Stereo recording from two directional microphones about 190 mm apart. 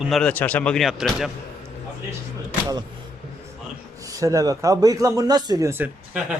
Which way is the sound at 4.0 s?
15° right (ahead or behind).